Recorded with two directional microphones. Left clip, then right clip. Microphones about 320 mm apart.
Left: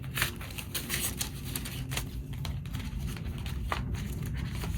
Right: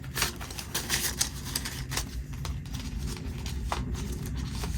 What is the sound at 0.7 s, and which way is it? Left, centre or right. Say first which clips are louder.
Typewriter: right 5 dB; centre.